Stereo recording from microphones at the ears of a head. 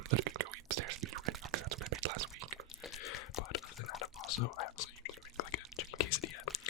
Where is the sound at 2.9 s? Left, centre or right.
Left.